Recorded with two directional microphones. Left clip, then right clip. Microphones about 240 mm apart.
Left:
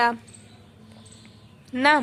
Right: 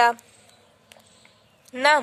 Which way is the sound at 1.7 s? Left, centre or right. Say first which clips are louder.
Even; right.